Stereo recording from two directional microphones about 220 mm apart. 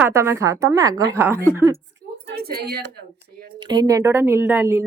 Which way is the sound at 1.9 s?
45° right (ahead or behind).